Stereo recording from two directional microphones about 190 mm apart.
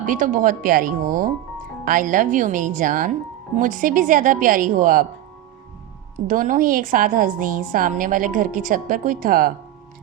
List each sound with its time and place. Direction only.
0.0 s a woman's voice: 45° right (ahead or behind)
6.2 s a woman's voice: 45° right (ahead or behind)